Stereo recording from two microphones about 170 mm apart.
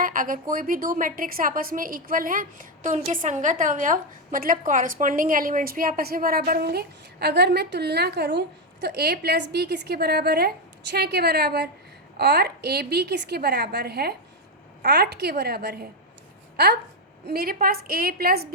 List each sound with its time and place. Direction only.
0.0 s a woman's voice: 55° right (ahead or behind)
17.2 s a woman's voice: 65° right (ahead or behind)